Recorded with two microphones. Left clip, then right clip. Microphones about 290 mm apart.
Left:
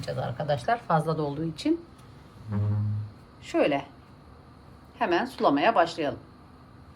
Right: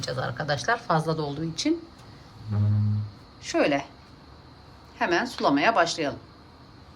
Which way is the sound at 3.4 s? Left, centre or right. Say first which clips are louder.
Right 1 dB; centre.